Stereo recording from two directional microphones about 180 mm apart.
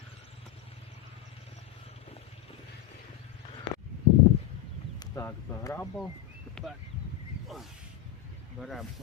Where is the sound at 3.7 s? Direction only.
35° left (ahead or behind).